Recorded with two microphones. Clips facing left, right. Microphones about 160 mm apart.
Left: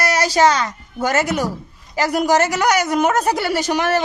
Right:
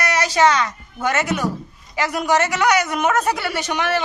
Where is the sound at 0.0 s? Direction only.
35° left (ahead or behind).